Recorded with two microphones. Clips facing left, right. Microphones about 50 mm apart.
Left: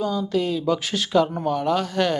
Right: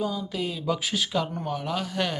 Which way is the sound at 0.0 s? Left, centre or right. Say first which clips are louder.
Left 6 dB; centre.